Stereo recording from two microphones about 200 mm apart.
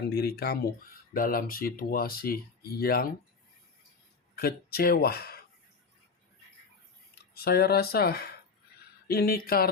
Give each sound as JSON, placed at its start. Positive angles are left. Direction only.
{"t": 0.1, "sound": "speech", "side_deg": 55}
{"t": 4.4, "sound": "speech", "side_deg": 50}
{"t": 7.2, "sound": "speech", "side_deg": 50}